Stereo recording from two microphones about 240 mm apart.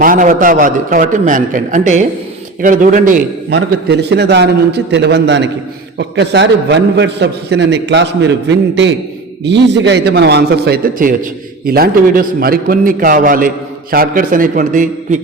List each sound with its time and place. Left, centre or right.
0.0 s a man's voice: right
3.5 s a man's voice: right